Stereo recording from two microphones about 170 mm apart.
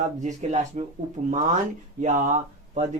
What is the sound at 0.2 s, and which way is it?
Speech, 45° right (ahead or behind).